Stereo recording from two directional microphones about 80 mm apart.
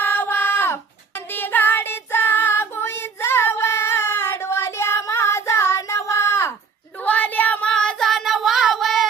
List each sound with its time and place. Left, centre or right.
0.0 s child singing: left
7.0 s a sound: centre
7.7 s child singing: centre